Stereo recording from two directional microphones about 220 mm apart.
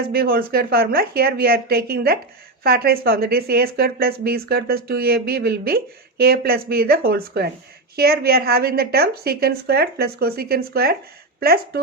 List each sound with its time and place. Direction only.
0.1 s a woman's voice: 45° right (ahead or behind)